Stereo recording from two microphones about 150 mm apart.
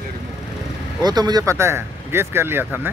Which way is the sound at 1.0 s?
25° right (ahead or behind).